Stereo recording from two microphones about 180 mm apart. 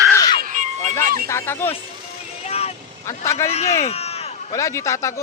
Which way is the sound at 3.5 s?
35° left (ahead or behind).